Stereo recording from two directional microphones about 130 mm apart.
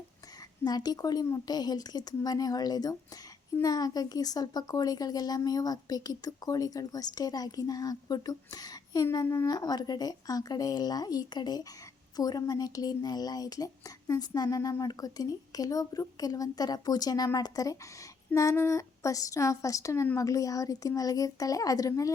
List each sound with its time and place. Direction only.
0.6 s speech: 30° left (ahead or behind)